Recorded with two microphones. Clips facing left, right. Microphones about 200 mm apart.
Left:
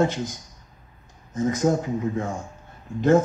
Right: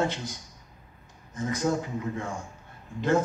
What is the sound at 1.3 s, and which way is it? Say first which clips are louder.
Speech: left 6 dB; 45° left (ahead or behind).